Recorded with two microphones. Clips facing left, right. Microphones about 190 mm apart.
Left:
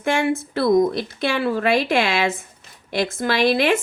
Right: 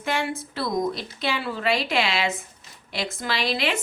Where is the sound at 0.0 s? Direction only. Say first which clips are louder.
Left 7 dB; 50° left (ahead or behind).